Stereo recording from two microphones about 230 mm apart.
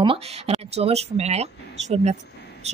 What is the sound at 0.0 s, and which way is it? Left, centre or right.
Speech, right.